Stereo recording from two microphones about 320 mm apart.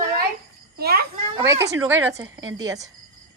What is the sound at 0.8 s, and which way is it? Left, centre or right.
Speech, right.